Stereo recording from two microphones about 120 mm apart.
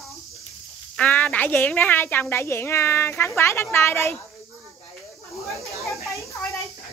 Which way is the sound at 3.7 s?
20° left (ahead or behind).